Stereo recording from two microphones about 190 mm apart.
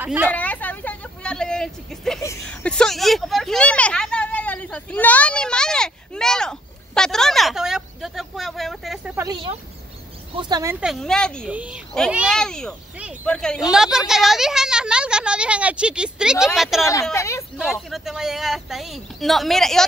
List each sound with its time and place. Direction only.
0.0 s speech: 5° right (ahead or behind)
0.3 s vehicle: 10° left (ahead or behind)
2.4 s a sound: 5° left (ahead or behind)
9.1 s a sound: 15° right (ahead or behind)
10.3 s speech: 20° right (ahead or behind)
10.8 s speech: centre (ahead or behind)
11.4 s speech: 5° right (ahead or behind)
17.1 s speech: 15° left (ahead or behind)
17.6 s speech: centre (ahead or behind)